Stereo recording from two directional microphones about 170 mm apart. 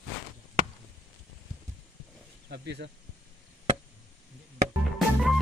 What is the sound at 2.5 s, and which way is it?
Speech, 80° right.